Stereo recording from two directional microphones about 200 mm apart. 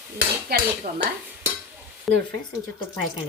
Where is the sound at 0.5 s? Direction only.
50° right (ahead or behind).